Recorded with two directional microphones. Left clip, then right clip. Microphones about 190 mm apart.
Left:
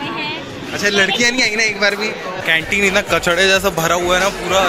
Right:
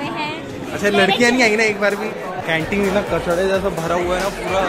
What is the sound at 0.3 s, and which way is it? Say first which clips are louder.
Speech: left 2 dB; 10° right (ahead or behind).